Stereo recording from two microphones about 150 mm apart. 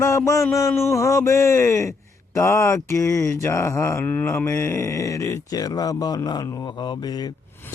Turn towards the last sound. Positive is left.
turn(degrees=30)  # may be behind; listen again after turning